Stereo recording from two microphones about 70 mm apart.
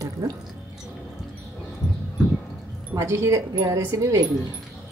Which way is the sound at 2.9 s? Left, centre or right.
Right.